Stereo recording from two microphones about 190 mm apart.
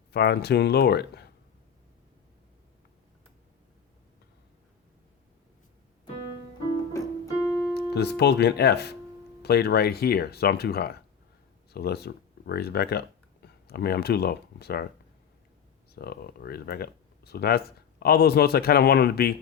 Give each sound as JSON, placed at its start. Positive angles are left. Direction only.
{"t": 0.1, "sound": "speech", "side_deg": 60}
{"t": 7.4, "sound": "keyboard", "side_deg": 0}
{"t": 7.7, "sound": "speech", "side_deg": 60}
{"t": 16.0, "sound": "speech", "side_deg": 55}